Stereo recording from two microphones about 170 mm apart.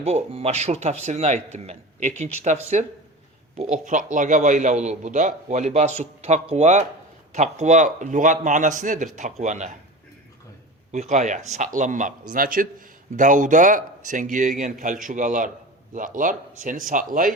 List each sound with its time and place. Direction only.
0.0 s a man's voice: 35° right (ahead or behind)
3.8 s a man's voice: 50° right (ahead or behind)
10.9 s a man's voice: 45° right (ahead or behind)